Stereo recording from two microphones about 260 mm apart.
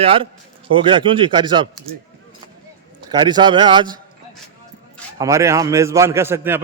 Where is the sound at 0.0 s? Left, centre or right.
Right.